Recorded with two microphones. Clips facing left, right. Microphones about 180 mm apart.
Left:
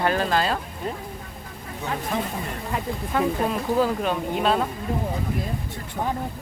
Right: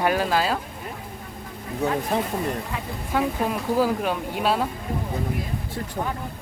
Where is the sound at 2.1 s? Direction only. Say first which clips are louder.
Left 1 dB; 35° right (ahead or behind).